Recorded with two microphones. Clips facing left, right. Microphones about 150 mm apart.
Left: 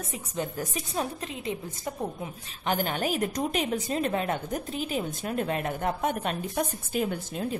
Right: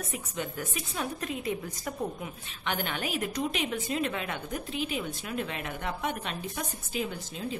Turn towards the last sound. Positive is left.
turn(degrees=50)  # may be behind; listen again after turning